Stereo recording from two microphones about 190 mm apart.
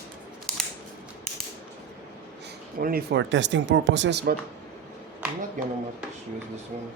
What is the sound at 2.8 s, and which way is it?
Speech, 55° right (ahead or behind).